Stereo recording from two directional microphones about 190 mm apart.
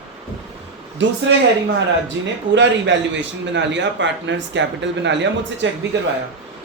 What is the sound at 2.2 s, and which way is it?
Speech, 80° right.